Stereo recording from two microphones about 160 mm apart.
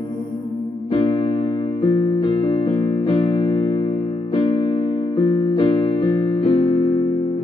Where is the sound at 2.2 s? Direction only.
30° left (ahead or behind).